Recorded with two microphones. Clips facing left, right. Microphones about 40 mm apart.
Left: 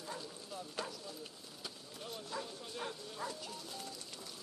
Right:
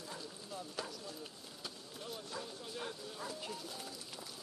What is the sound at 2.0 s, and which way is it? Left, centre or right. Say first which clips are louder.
Speech: left 2 dB; centre.